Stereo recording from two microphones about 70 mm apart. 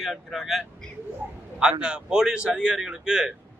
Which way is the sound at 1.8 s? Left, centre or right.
Centre.